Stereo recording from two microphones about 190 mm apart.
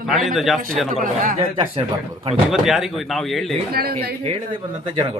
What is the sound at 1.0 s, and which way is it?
Speech, 45° right (ahead or behind).